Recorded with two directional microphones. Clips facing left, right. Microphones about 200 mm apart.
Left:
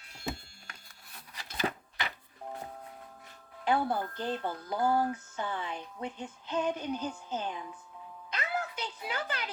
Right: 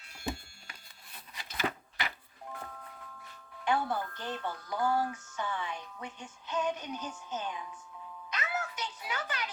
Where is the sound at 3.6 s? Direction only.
35° left (ahead or behind).